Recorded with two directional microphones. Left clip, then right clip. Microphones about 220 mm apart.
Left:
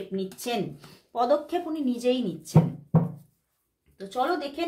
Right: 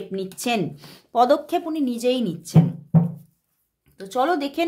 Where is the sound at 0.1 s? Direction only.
45° right (ahead or behind).